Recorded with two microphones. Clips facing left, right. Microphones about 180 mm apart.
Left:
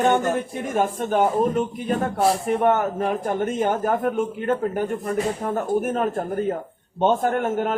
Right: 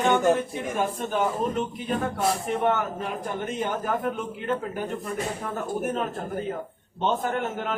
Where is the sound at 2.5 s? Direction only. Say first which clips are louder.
Left 5 dB; 50° left (ahead or behind).